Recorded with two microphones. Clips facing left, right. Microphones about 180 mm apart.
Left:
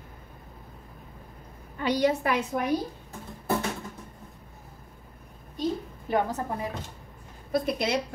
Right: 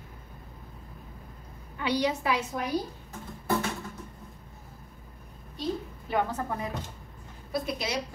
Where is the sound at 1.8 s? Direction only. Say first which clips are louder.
Left 3 dB; 50° left (ahead or behind).